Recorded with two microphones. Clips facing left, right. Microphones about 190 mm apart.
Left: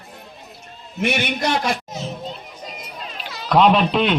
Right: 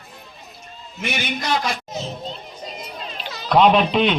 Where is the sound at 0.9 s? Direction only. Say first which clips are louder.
Left 5 dB; 60° left (ahead or behind).